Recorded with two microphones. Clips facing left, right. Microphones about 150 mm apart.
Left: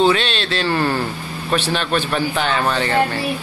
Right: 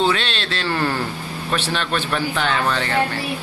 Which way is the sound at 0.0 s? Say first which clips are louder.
Left 4 dB; 10° left (ahead or behind).